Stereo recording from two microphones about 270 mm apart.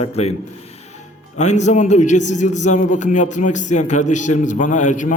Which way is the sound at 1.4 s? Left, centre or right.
Left.